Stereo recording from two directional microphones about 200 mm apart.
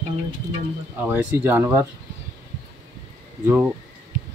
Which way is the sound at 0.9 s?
10° right (ahead or behind).